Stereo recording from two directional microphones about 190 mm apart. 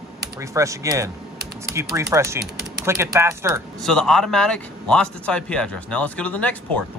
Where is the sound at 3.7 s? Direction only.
Centre (ahead or behind).